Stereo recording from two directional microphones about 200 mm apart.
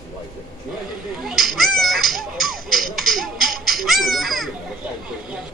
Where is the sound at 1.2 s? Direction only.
Centre (ahead or behind).